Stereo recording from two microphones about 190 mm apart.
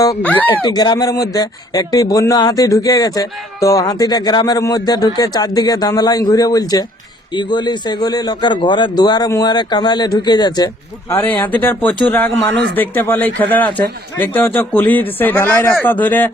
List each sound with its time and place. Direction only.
0.2 s a man's voice: 10° left (ahead or behind)
0.6 s speech: 20° left (ahead or behind)
11.1 s a man's voice: 10° left (ahead or behind)
12.3 s speech: 70° right (ahead or behind)
12.7 s a man's voice: 10° left (ahead or behind)